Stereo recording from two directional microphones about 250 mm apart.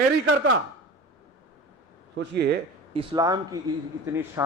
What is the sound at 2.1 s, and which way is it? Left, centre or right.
Speech, right.